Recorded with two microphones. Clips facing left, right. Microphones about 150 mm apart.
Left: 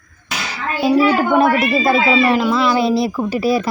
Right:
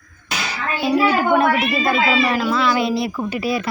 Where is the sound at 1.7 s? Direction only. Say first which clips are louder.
Left 4 dB; 35° left (ahead or behind).